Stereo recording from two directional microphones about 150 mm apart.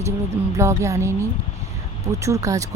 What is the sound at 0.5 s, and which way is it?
Speech, 20° right (ahead or behind).